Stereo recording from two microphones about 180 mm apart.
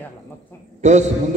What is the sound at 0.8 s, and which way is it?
Speech, 40° right (ahead or behind).